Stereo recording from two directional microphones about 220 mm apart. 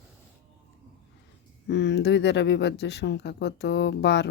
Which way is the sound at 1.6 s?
50° left (ahead or behind).